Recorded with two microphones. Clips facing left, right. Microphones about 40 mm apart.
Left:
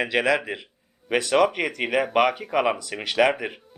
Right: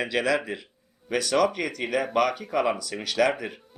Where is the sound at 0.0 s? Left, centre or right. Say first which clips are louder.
Left 3 dB; left.